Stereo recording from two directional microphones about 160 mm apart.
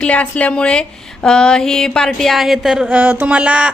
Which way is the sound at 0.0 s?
10° left (ahead or behind).